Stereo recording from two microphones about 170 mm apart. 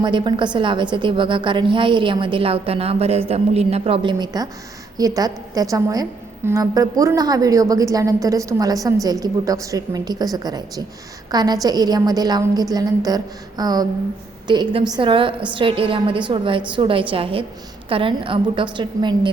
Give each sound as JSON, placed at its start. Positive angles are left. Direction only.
{"t": 0.0, "sound": "a woman's voice", "side_deg": -25}